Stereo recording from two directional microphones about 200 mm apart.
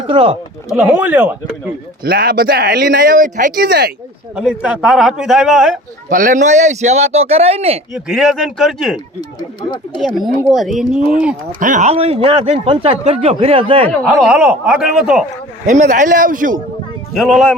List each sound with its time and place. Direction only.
0.1 s speech: 25° right (ahead or behind)
0.8 s speech: 10° right (ahead or behind)
2.0 s speech: 50° right (ahead or behind)
3.2 s speech: 40° right (ahead or behind)
4.4 s a man's voice: 5° right (ahead or behind)
6.1 s a man's voice: 40° right (ahead or behind)
7.9 s a man's voice: 5° right (ahead or behind)
9.6 s speech: 20° left (ahead or behind)
10.0 s a man's voice: centre (ahead or behind)
11.6 s speech: 40° right (ahead or behind)
13.8 s a man's voice: 5° left (ahead or behind)
15.6 s a man's voice: 40° right (ahead or behind)
17.2 s a man's voice: centre (ahead or behind)